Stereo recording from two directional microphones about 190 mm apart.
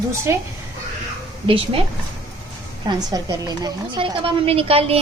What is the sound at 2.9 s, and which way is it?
A woman's voice, 20° right (ahead or behind).